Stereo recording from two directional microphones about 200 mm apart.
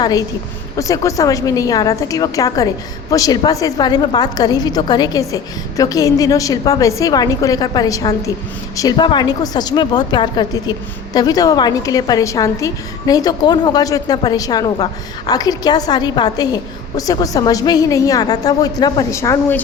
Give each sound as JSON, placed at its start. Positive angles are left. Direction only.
{"t": 0.0, "sound": "a woman's voice", "side_deg": 20}